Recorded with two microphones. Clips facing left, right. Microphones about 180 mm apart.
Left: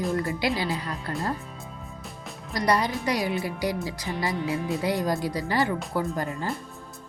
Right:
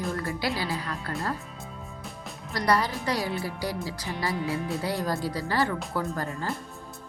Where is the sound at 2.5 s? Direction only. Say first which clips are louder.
Left 1 dB; 15° left (ahead or behind).